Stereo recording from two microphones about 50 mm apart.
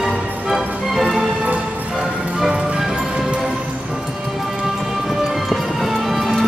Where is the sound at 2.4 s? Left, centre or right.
Centre.